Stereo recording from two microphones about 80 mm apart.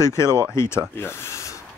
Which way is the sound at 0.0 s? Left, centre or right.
Left.